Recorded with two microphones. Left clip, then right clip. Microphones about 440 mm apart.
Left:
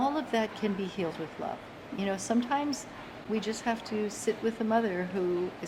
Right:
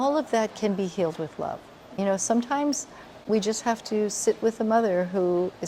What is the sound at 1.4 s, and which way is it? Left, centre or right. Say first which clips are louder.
A woman's voice: right 5 dB; right.